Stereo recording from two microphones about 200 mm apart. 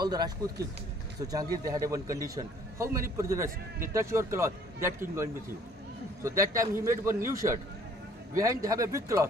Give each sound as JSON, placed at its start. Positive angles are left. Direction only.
{"t": 0.0, "sound": "a man's voice", "side_deg": -20}